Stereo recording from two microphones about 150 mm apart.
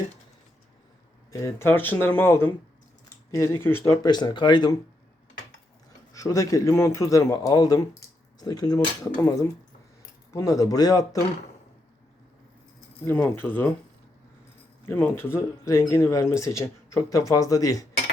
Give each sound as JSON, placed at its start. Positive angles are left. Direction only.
{"t": 1.3, "sound": "speech", "side_deg": 20}
{"t": 4.0, "sound": "speech", "side_deg": 30}
{"t": 6.1, "sound": "speech", "side_deg": 20}
{"t": 13.1, "sound": "speech", "side_deg": 15}
{"t": 14.8, "sound": "speech", "side_deg": 15}